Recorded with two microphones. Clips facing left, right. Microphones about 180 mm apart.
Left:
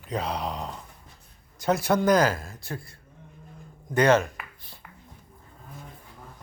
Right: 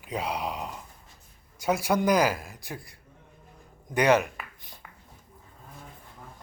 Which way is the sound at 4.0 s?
15° right (ahead or behind).